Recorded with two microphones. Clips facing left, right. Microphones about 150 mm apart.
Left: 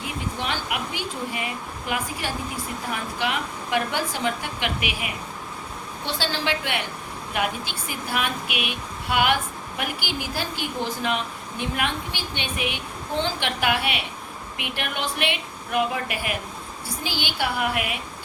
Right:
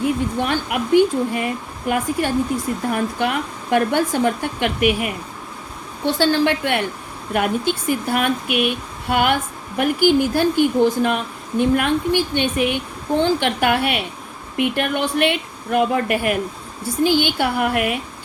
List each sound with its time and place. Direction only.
0.0 s speech: 50° right (ahead or behind)
6.1 s speech: 50° right (ahead or behind)